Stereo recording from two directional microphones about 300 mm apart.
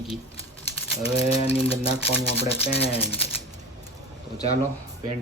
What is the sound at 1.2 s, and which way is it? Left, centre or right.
Speech, centre.